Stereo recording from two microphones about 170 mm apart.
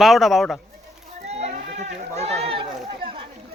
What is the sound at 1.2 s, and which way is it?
Children playing, 40° right (ahead or behind).